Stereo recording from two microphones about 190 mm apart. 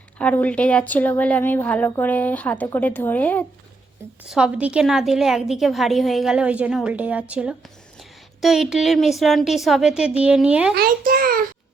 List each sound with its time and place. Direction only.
0.2 s speech: 5° left (ahead or behind)
4.3 s a woman's voice: 5° right (ahead or behind)
10.8 s a child's voice: 50° right (ahead or behind)